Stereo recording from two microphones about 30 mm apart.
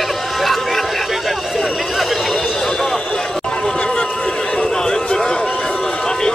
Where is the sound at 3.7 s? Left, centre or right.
Left.